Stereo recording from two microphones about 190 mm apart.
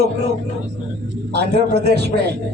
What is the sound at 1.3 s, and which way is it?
Speech, 60° right (ahead or behind).